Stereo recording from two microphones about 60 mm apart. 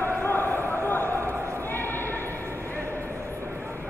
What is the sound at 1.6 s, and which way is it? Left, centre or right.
Clip-clop, left.